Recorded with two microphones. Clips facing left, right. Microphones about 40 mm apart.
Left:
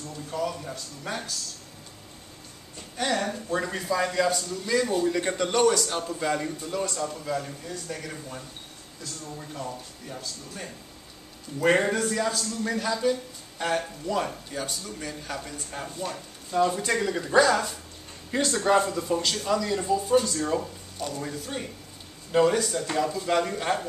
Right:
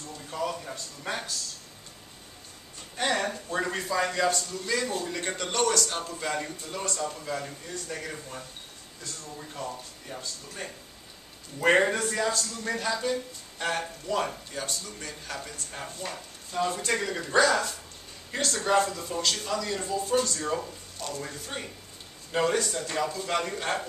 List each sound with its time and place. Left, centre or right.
0.3 s speech: centre
3.0 s a man's voice: centre
18.4 s a man's voice: centre